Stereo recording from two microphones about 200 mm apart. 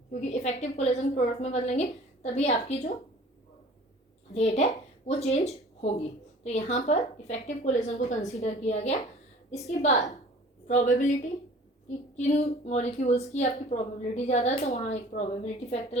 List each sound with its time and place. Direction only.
0.1 s a woman's voice: 35° left (ahead or behind)
4.4 s a woman's voice: 30° left (ahead or behind)
12.1 s a woman's voice: 35° left (ahead or behind)